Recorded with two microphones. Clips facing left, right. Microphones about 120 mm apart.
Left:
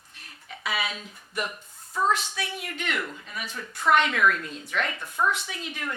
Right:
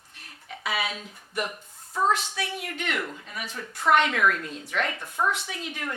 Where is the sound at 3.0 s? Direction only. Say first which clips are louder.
Even; 40° right (ahead or behind).